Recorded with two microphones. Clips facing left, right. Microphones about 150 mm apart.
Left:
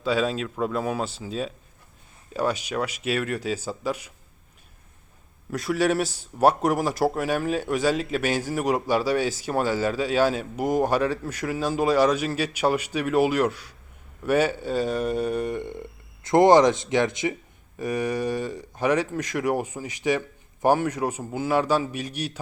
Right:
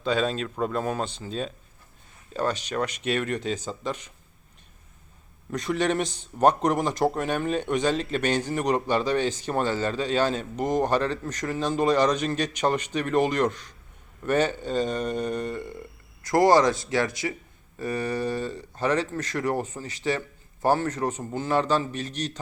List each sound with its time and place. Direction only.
0.0 s speech: 5° left (ahead or behind)
5.5 s speech: 5° left (ahead or behind)